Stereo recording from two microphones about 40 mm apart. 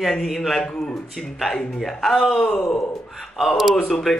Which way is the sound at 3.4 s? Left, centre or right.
Centre.